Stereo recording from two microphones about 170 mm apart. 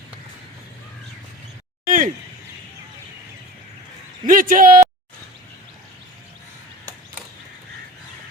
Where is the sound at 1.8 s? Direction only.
55° right (ahead or behind).